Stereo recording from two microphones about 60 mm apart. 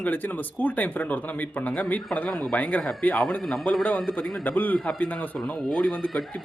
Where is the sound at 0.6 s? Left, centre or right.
Left.